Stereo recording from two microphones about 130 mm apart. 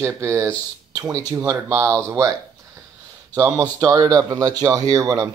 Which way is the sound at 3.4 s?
20° right (ahead or behind).